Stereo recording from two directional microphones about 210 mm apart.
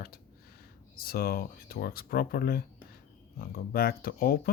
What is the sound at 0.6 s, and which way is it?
Speech, 45° left (ahead or behind).